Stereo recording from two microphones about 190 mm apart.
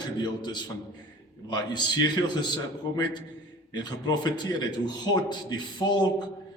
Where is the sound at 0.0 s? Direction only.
20° left (ahead or behind).